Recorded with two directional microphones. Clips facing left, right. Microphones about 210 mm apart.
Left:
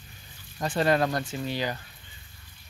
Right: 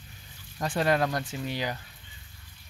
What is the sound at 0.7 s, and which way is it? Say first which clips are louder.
Speech: left 2 dB; 10° right (ahead or behind).